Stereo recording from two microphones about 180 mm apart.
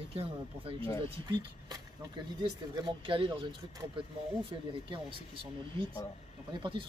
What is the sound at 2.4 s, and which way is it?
Speech, 25° right (ahead or behind).